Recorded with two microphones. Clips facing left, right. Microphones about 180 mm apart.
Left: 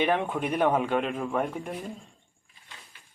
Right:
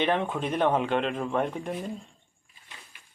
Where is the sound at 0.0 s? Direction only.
10° left (ahead or behind).